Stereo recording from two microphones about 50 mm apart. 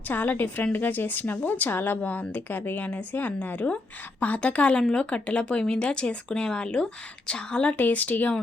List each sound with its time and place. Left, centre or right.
0.1 s a woman's voice: left
7.8 s a woman's voice: left